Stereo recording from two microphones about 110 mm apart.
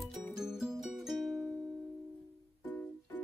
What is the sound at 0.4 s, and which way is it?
Music, 5° right (ahead or behind).